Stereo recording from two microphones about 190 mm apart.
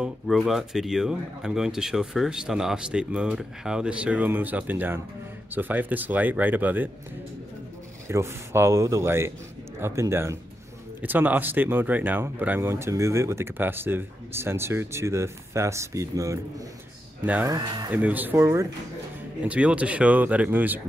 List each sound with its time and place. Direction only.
0.0 s speech: centre (ahead or behind)
8.1 s speech: 15° right (ahead or behind)
17.6 s speech: 20° right (ahead or behind)
17.9 s speech: 10° right (ahead or behind)